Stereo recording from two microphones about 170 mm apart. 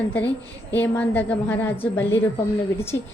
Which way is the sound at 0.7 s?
10° left (ahead or behind).